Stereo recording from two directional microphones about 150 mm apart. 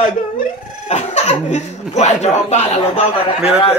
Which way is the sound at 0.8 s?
45° left (ahead or behind).